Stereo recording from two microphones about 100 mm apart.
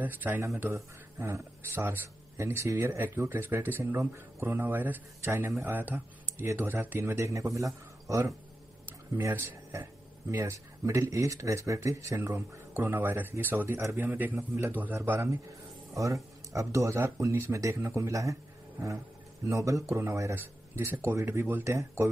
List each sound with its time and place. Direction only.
0.0 s a man's voice: 20° right (ahead or behind)
19.5 s speech: 30° right (ahead or behind)